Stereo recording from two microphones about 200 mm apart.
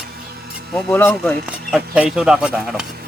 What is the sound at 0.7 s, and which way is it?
Speech, 10° left (ahead or behind).